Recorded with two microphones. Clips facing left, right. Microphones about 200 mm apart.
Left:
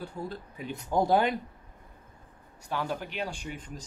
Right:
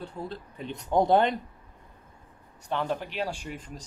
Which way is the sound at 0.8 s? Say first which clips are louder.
Right 3 dB; 20° right (ahead or behind).